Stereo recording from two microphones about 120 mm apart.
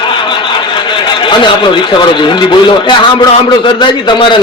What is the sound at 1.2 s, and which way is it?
A man's voice, 40° left (ahead or behind).